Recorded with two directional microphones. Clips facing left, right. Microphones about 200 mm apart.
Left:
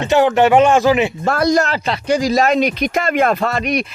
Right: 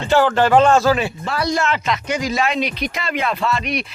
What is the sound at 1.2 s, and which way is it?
Speech, 45° left (ahead or behind).